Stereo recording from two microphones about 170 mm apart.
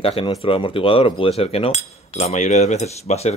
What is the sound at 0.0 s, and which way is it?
Speech, 35° left (ahead or behind).